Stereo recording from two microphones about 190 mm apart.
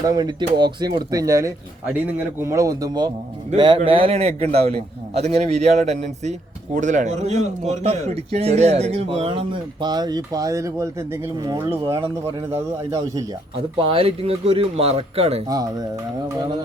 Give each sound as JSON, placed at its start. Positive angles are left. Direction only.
{"t": 0.0, "sound": "a man's voice", "side_deg": -20}
{"t": 13.7, "sound": "speech", "side_deg": -30}
{"t": 15.4, "sound": "speech", "side_deg": -20}